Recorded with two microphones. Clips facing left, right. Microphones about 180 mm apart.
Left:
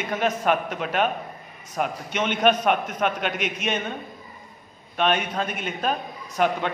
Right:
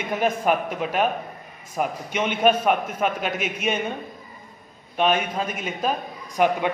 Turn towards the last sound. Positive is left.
turn(degrees=-10)  # may be behind; listen again after turning